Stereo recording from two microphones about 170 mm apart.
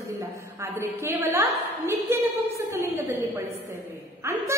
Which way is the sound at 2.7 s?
15° right (ahead or behind).